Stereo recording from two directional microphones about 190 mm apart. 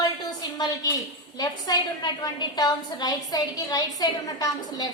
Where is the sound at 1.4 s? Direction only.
20° left (ahead or behind).